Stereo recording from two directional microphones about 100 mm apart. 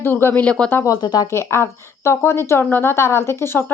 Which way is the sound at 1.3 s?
25° left (ahead or behind).